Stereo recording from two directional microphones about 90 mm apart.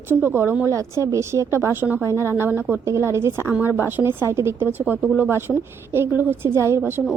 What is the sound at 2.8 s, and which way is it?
A woman's voice, 30° right (ahead or behind).